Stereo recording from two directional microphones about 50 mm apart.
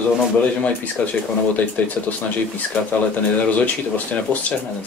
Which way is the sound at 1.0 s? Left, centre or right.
Left.